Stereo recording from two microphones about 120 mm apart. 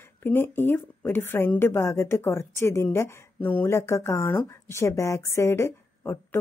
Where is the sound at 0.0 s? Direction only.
20° left (ahead or behind).